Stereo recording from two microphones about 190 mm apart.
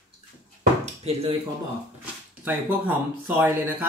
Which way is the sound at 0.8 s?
35° right (ahead or behind).